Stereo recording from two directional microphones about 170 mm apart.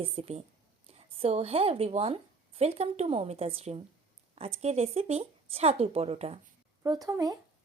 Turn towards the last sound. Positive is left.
turn(degrees=-20)  # may be behind; listen again after turning